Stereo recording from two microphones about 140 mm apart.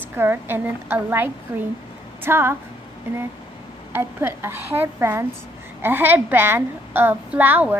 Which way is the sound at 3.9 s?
15° right (ahead or behind).